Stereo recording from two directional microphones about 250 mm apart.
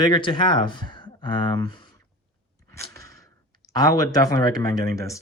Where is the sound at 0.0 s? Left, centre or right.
Centre.